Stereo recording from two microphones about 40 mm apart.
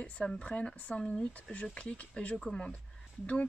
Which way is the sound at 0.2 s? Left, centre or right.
Left.